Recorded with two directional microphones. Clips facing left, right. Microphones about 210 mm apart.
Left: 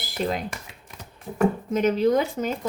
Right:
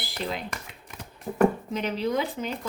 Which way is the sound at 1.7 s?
45° left (ahead or behind).